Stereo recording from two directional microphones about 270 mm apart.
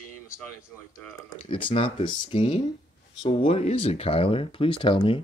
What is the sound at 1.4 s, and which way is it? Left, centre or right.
Speech, centre.